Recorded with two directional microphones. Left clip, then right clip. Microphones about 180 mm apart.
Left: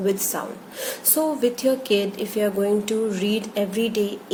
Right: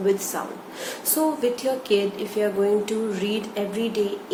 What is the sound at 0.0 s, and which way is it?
A woman's voice, 50° left (ahead or behind).